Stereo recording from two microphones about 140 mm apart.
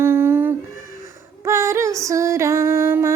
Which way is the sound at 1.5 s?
20° right (ahead or behind).